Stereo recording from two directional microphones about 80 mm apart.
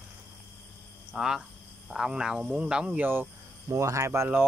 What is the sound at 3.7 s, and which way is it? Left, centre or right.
Speech, right.